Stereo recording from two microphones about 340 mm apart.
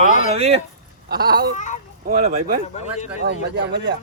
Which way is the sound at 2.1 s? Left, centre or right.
Right.